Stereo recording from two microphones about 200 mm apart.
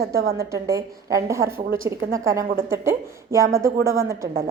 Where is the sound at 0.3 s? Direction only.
15° right (ahead or behind).